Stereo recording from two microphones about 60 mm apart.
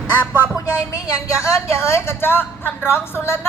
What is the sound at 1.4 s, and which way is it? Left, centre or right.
A woman's voice, left.